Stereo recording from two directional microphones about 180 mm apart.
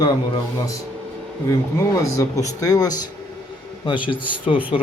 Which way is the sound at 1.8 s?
20° left (ahead or behind).